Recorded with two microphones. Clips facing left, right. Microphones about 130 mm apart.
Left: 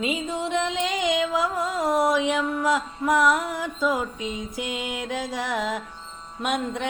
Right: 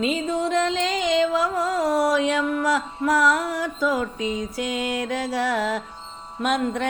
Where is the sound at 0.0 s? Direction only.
20° left (ahead or behind).